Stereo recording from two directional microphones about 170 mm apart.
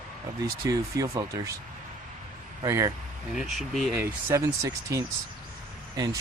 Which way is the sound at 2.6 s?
20° right (ahead or behind).